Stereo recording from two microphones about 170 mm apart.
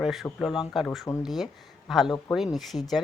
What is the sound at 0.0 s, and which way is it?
A woman's voice, centre (ahead or behind).